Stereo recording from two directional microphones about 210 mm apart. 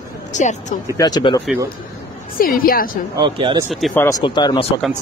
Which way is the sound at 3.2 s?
20° right (ahead or behind).